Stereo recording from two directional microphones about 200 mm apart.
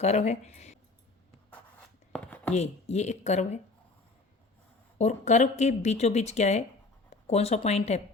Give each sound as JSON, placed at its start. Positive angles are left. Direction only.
{"t": 0.0, "sound": "speech", "side_deg": 35}
{"t": 2.1, "sound": "a sound", "side_deg": 5}
{"t": 2.5, "sound": "speech", "side_deg": 35}
{"t": 4.9, "sound": "speech", "side_deg": 35}